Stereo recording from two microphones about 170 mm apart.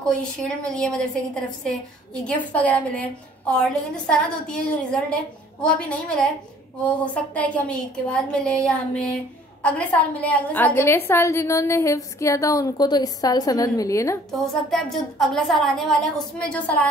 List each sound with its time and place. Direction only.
0.1 s a woman's voice: 5° left (ahead or behind)
7.3 s a woman's voice: 5° left (ahead or behind)
14.4 s a woman's voice: centre (ahead or behind)